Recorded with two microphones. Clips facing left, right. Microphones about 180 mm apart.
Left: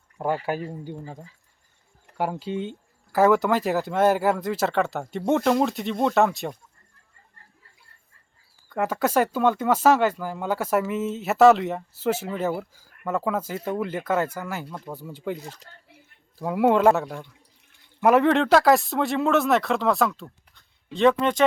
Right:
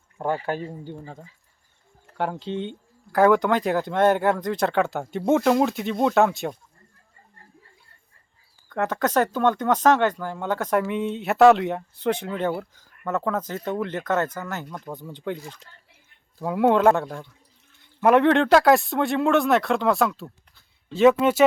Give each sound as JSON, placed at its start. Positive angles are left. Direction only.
{"t": 0.2, "sound": "speech", "side_deg": 5}
{"t": 2.1, "sound": "speech", "side_deg": 5}
{"t": 8.7, "sound": "speech", "side_deg": 10}
{"t": 15.4, "sound": "speech", "side_deg": 40}
{"t": 16.4, "sound": "speech", "side_deg": 0}